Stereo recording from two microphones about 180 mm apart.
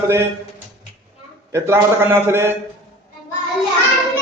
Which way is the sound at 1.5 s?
15° right (ahead or behind).